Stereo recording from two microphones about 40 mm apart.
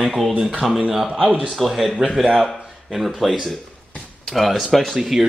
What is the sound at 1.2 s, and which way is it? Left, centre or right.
Speech, right.